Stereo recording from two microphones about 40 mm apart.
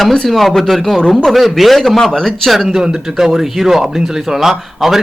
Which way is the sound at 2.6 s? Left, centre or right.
Centre.